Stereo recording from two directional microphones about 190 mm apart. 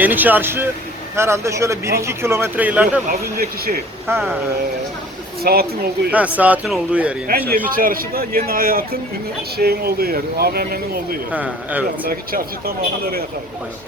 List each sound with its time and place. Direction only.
0.0 s speech: 10° right (ahead or behind)
3.1 s speech: 50° right (ahead or behind)
4.1 s speech: 5° right (ahead or behind)
5.4 s speech: 55° right (ahead or behind)
6.1 s speech: 5° right (ahead or behind)
7.3 s speech: 50° right (ahead or behind)
11.3 s speech: 10° right (ahead or behind)
12.0 s speech: 50° right (ahead or behind)